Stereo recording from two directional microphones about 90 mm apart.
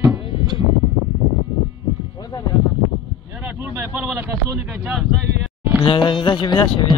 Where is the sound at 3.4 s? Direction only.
25° right (ahead or behind).